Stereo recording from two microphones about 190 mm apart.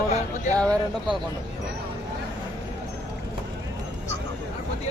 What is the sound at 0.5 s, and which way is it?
Speech, 5° left (ahead or behind).